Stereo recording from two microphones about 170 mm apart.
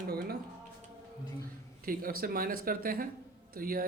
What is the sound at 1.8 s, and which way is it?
Speech, 60° right (ahead or behind).